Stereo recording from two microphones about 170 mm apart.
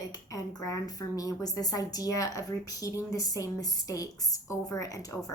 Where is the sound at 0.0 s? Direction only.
20° left (ahead or behind).